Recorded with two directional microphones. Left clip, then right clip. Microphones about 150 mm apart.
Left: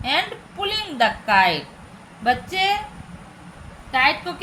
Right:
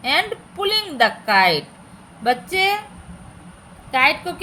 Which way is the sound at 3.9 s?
40° right (ahead or behind).